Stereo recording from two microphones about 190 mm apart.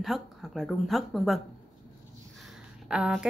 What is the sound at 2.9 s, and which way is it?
Speech, 5° right (ahead or behind).